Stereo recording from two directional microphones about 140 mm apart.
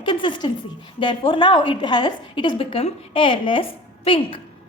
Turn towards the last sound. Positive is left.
turn(degrees=40)  # may be behind; listen again after turning